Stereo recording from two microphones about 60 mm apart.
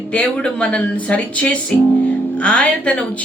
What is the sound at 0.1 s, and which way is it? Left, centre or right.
Speech, centre.